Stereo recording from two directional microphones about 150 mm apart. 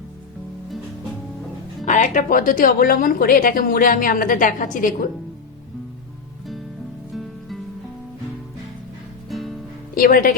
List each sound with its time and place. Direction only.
1.8 s speech: 55° left (ahead or behind)
7.1 s music: centre (ahead or behind)
9.3 s music: centre (ahead or behind)
9.9 s speech: 65° left (ahead or behind)